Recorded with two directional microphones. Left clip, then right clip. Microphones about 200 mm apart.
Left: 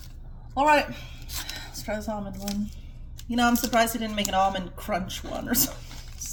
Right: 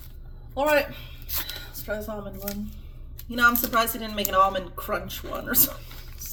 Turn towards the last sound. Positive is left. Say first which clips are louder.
# even
turn(degrees=15)  # may be behind; listen again after turning